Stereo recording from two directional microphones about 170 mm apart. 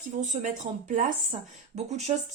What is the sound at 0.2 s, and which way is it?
Speech, 45° right (ahead or behind).